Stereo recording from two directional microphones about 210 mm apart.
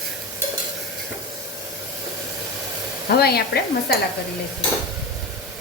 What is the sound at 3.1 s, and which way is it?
Stir, 50° left (ahead or behind).